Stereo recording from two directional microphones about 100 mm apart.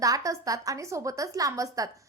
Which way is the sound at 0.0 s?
35° right (ahead or behind).